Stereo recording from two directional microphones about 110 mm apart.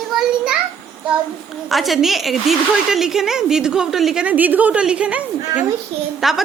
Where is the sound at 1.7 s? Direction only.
Centre (ahead or behind).